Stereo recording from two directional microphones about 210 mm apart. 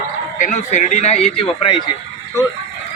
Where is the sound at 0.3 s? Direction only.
35° left (ahead or behind).